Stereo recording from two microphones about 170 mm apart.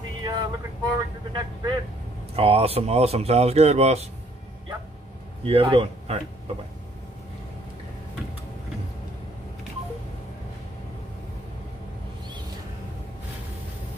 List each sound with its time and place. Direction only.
0.2 s vehicle: 25° right (ahead or behind)
2.3 s speech: 35° right (ahead or behind)
5.4 s speech: 35° right (ahead or behind)